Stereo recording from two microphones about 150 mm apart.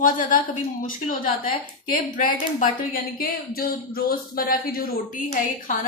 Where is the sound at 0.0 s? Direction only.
65° left (ahead or behind).